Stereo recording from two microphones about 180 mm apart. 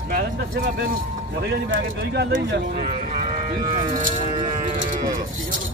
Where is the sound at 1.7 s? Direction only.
90° right.